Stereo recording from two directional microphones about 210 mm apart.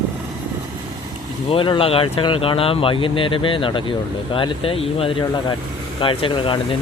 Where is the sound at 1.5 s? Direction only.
25° left (ahead or behind).